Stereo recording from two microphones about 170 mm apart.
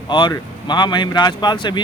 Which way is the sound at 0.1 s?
25° left (ahead or behind).